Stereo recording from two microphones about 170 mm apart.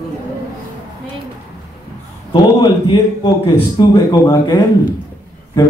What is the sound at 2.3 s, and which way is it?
A man's voice, 30° left (ahead or behind).